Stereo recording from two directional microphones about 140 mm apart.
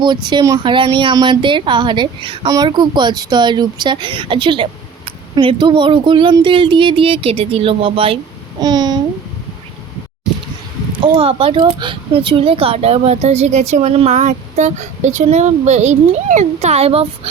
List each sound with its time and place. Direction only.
0.0 s speech: 35° right (ahead or behind)
8.6 s a child's voice: 30° right (ahead or behind)
11.2 s speech: 40° right (ahead or behind)